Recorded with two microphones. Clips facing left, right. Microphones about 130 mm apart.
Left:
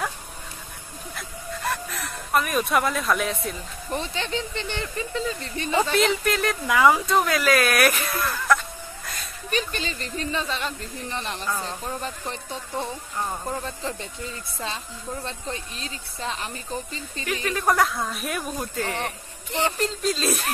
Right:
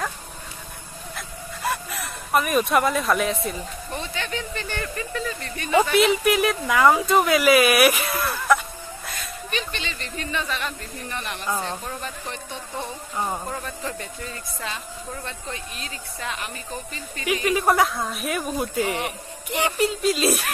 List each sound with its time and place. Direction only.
1.1 s a sound: 5° right (ahead or behind)
3.9 s speech: 30° left (ahead or behind)
5.9 s speech: 10° right (ahead or behind)
9.5 s speech: 40° left (ahead or behind)
13.5 s speech: 25° left (ahead or behind)
17.2 s speech: 10° right (ahead or behind)